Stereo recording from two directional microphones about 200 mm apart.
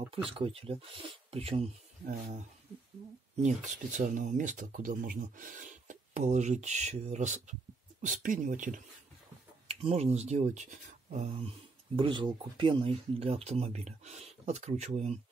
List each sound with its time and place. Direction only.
0.3 s speech: 30° right (ahead or behind)
9.7 s speech: 30° right (ahead or behind)